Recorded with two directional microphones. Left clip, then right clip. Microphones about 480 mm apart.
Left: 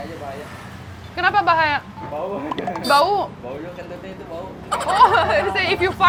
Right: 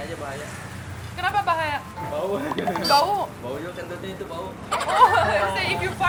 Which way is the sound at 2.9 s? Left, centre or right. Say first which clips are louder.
Left 4 dB; left.